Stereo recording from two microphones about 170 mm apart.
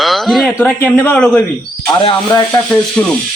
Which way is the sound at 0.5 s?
10° left (ahead or behind).